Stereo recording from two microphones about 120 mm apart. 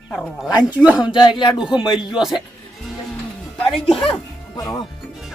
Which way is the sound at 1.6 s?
5° right (ahead or behind).